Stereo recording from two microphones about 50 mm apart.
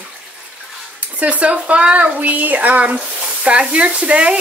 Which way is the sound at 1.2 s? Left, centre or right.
Right.